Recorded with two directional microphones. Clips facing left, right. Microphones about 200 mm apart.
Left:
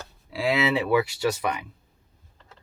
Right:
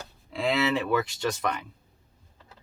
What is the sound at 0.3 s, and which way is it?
Speech, 5° left (ahead or behind).